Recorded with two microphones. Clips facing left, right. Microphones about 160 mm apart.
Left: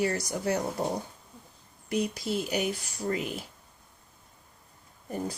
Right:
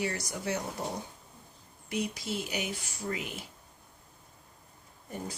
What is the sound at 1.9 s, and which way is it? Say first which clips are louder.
Speech: left 5 dB; 40° left (ahead or behind).